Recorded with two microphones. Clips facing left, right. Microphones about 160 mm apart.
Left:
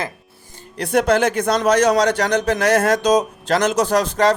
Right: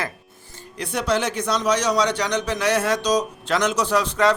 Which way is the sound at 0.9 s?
50° left (ahead or behind).